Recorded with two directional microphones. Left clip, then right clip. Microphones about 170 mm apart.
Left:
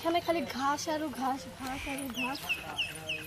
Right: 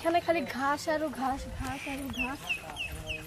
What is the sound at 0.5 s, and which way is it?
Speech, 20° right (ahead or behind).